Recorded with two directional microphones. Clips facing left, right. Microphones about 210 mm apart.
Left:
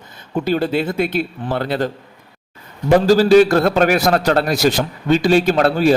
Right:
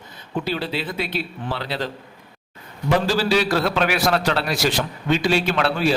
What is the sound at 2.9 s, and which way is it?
A man's voice, 45° left (ahead or behind).